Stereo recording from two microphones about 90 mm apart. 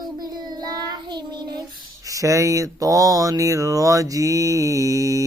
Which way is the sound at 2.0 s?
35° right (ahead or behind).